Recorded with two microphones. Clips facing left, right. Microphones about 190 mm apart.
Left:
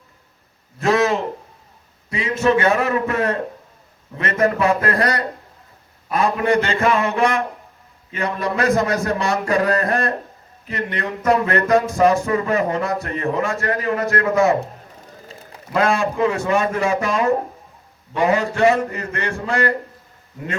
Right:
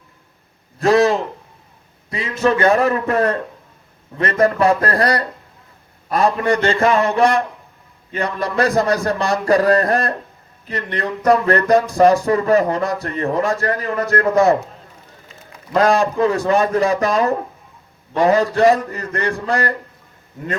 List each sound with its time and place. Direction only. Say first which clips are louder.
0.8 s a man's voice: right 3 dB; 35° right (ahead or behind)
15.7 s speech: right 4 dB; 35° right (ahead or behind)